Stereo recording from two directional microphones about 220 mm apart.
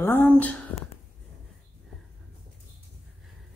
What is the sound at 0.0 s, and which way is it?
Speech, 10° left (ahead or behind).